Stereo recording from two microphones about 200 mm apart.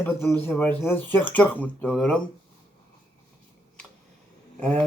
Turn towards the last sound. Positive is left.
turn(degrees=5)  # may be behind; listen again after turning